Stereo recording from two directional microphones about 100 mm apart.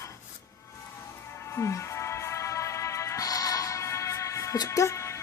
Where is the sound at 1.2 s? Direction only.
25° left (ahead or behind).